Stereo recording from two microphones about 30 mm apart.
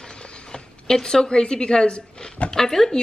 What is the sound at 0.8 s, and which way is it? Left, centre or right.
Speech, centre.